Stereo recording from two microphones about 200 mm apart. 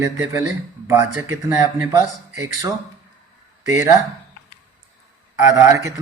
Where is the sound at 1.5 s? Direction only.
20° right (ahead or behind).